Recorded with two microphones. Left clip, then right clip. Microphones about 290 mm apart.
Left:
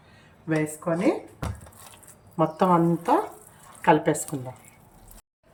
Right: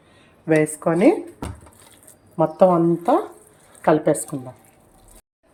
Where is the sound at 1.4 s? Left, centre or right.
Centre.